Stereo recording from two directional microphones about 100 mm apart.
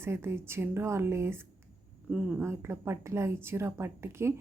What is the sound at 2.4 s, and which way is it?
A woman's voice, 25° right (ahead or behind).